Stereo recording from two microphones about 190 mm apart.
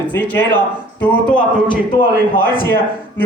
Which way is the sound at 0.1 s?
10° left (ahead or behind).